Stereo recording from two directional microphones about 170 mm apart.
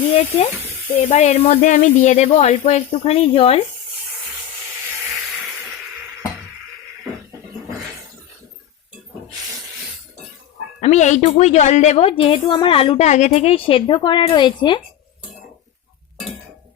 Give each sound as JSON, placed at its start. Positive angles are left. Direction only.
{"t": 0.1, "sound": "a woman's voice", "side_deg": 35}
{"t": 10.8, "sound": "a woman's voice", "side_deg": 45}